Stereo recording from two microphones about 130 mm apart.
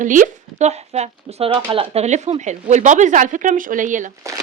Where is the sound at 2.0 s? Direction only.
60° right (ahead or behind); by 4.1 s 80° right.